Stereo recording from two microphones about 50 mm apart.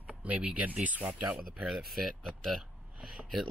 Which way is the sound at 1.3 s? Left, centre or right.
Centre.